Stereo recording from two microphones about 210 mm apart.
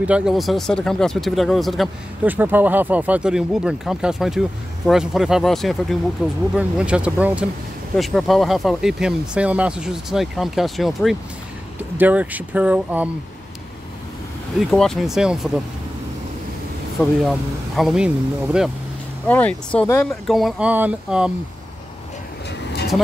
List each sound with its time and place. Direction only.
0.0 s speech: 5° right (ahead or behind)
14.7 s speech: centre (ahead or behind)
17.2 s speech: centre (ahead or behind)
19.2 s speech: 5° left (ahead or behind)